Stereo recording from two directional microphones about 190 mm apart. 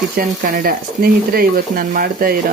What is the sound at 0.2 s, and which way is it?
Speech, 45° right (ahead or behind).